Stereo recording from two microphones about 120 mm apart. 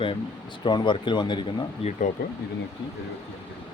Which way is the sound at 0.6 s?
40° left (ahead or behind).